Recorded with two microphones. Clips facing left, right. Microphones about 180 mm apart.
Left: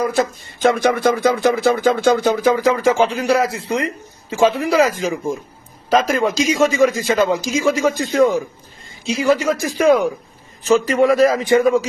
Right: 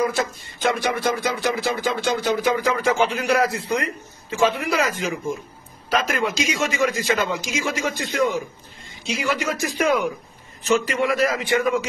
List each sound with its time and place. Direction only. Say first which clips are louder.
0.1 s speech: left 6 dB; 45° left (ahead or behind)